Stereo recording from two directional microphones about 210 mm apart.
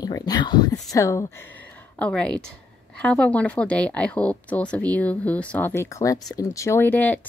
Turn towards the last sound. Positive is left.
turn(degrees=10)  # may be behind; listen again after turning